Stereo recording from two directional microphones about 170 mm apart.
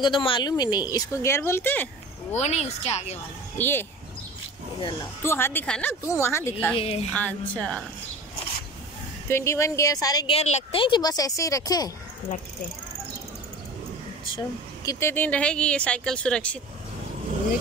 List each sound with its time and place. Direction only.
0.0 s speech: 30° left (ahead or behind); by 1.9 s 10° left (ahead or behind)
2.3 s a woman's voice: 40° left (ahead or behind)
3.5 s speech: 15° left (ahead or behind)
5.2 s speech: 15° left (ahead or behind)
6.7 s a woman's voice: 35° left (ahead or behind)
7.1 s speech: 5° left (ahead or behind)
9.3 s speech: 15° left (ahead or behind)
10.3 s speech: 35° left (ahead or behind); by 11.9 s 20° left (ahead or behind)
14.9 s speech: 15° left (ahead or behind)